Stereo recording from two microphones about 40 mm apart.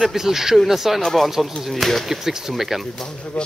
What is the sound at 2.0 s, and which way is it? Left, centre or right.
Speech, centre.